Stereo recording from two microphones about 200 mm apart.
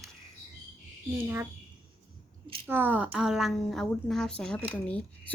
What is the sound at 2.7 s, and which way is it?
A woman's voice, 10° right (ahead or behind).